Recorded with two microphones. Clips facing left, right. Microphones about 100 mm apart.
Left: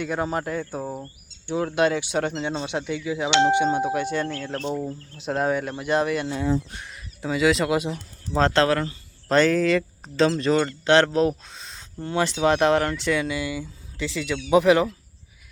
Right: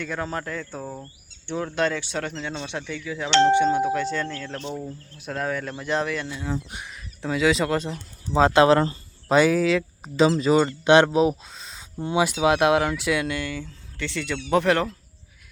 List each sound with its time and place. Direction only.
0.0 s speech: 15° left (ahead or behind)
2.2 s speech: 25° left (ahead or behind)
2.6 s speech: 15° left (ahead or behind)
6.7 s speech: 15° right (ahead or behind)
6.9 s speech: centre (ahead or behind)
8.4 s speech: 10° right (ahead or behind)
8.7 s speech: 30° right (ahead or behind)
9.3 s speech: 5° right (ahead or behind)